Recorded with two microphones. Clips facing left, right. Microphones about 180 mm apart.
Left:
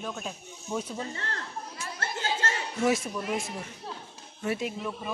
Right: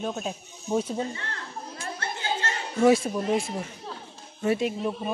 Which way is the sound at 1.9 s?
45° left (ahead or behind).